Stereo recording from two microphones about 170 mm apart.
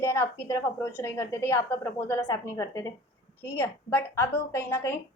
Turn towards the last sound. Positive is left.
turn(degrees=15)  # may be behind; listen again after turning